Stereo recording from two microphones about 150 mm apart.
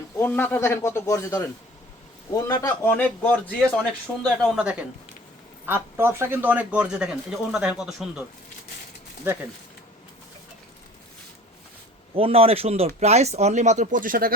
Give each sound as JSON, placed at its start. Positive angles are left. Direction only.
{"t": 0.2, "sound": "a man's voice", "side_deg": 15}
{"t": 4.4, "sound": "speech", "side_deg": -5}
{"t": 9.2, "sound": "speech", "side_deg": -15}
{"t": 12.1, "sound": "speech", "side_deg": -40}